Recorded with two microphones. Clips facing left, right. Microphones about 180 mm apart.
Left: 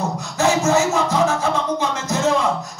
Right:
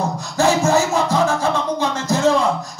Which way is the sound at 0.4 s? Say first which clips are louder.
Right 1 dB; 30° right (ahead or behind).